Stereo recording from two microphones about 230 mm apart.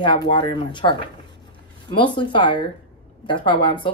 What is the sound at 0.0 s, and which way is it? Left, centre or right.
Speech, centre.